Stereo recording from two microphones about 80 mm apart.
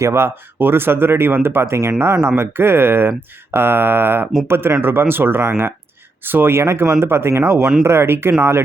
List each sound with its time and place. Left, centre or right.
0.0 s speech: right